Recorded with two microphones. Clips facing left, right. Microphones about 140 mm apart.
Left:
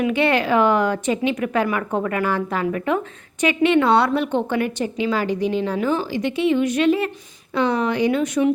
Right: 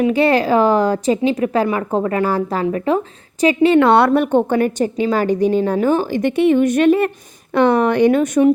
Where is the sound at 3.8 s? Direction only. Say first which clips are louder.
Right 5 dB; 60° right (ahead or behind).